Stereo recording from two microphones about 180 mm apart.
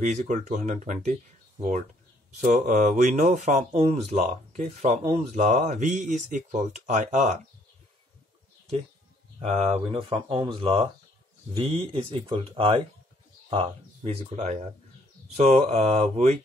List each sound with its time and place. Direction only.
0.0 s speech: 40° right (ahead or behind)
9.4 s speech: 35° right (ahead or behind)
15.7 s speech: 35° right (ahead or behind)